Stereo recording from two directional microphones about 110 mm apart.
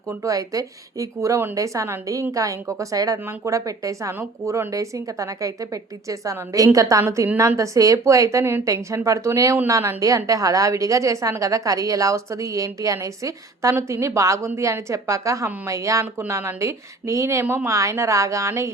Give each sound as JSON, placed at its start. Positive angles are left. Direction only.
{"t": 0.1, "sound": "a woman's voice", "side_deg": -30}
{"t": 17.4, "sound": "speech", "side_deg": -15}
{"t": 17.7, "sound": "a woman's voice", "side_deg": -30}